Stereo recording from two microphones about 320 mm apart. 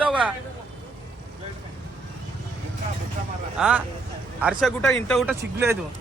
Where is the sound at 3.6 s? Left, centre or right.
Centre.